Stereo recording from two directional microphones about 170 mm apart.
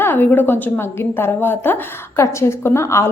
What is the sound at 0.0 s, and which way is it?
A woman's voice, 10° left (ahead or behind).